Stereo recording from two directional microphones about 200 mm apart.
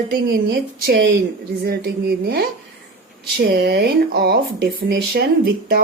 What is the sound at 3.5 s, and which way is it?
Speech, 50° right (ahead or behind).